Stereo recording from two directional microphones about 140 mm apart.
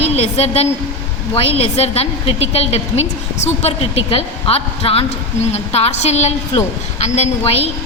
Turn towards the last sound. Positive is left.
turn(degrees=50)  # may be behind; listen again after turning